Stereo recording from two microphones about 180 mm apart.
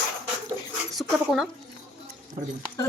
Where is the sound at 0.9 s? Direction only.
Centre (ahead or behind).